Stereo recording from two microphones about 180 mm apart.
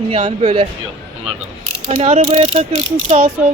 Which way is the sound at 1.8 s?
35° right (ahead or behind).